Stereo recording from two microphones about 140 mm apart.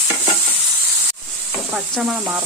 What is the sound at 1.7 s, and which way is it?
Speech, centre (ahead or behind).